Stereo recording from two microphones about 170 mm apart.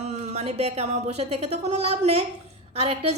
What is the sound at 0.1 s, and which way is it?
A woman's voice, 40° right (ahead or behind).